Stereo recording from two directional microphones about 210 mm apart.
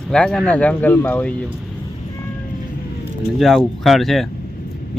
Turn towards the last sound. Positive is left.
turn(degrees=0)  # may be behind; listen again after turning